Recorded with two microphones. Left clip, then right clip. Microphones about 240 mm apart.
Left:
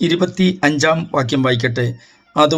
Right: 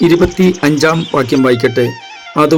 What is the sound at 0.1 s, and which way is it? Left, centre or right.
A man's voice, right.